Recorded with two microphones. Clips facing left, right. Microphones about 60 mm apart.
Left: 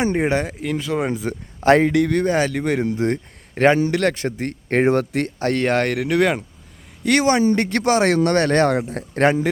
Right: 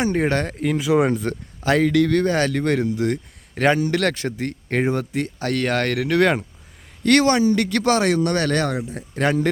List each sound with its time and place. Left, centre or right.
0.0 s speech: left; by 1.1 s centre
1.1 s speech: centre
1.6 s speech: left; by 2.8 s centre
2.8 s speech: left
4.9 s a man's voice: left
5.4 s speech: left
6.0 s speech: centre
7.4 s speech: left
8.7 s a man's voice: left